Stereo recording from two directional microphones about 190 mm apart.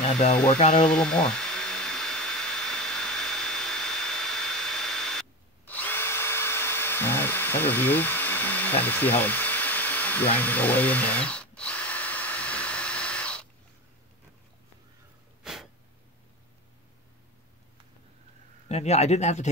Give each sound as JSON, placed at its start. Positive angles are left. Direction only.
{"t": 0.0, "sound": "a sound", "side_deg": 35}
{"t": 0.5, "sound": "speech", "side_deg": 35}
{"t": 0.8, "sound": "a sound", "side_deg": 5}
{"t": 5.7, "sound": "drill", "side_deg": 10}
{"t": 15.4, "sound": "sniff", "side_deg": 0}
{"t": 18.7, "sound": "speech", "side_deg": 35}